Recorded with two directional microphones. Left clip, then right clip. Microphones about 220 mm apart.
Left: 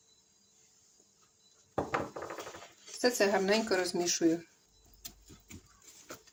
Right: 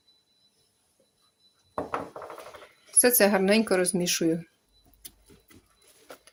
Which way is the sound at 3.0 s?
50° right (ahead or behind).